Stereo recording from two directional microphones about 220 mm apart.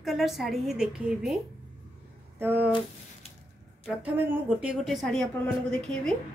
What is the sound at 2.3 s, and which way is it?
Speech, 10° right (ahead or behind).